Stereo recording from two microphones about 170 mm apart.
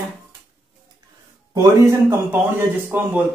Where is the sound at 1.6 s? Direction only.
15° right (ahead or behind).